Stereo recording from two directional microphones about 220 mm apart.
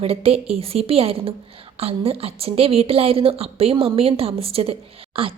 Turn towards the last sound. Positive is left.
turn(degrees=-25)  # may be behind; listen again after turning